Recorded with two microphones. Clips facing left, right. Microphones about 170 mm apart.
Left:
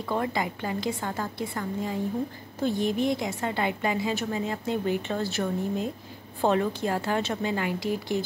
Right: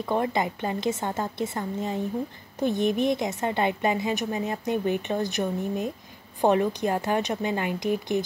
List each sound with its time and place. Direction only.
0.0 s a woman's voice: 20° right (ahead or behind)